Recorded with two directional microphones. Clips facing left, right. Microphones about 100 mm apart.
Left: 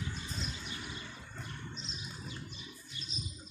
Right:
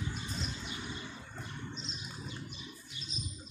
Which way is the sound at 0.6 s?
20° right (ahead or behind).